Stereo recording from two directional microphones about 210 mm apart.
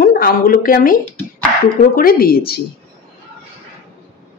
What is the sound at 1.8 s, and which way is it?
Speech, 40° left (ahead or behind).